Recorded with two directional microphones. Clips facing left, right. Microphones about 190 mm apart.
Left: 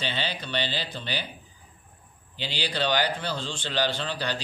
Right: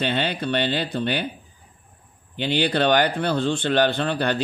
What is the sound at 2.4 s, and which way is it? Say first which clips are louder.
Speech: right 9 dB; 60° right (ahead or behind).